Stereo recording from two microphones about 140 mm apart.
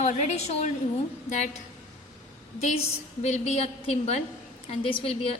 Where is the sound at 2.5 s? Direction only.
50° left (ahead or behind).